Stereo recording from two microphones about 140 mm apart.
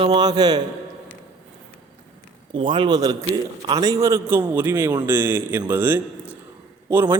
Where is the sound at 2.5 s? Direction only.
35° right (ahead or behind); by 6.4 s 10° right (ahead or behind).